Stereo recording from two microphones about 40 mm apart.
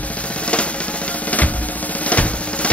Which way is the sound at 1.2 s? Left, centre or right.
Left.